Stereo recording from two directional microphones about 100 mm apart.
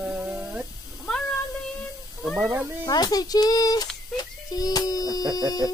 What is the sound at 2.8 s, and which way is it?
Speech, 40° left (ahead or behind).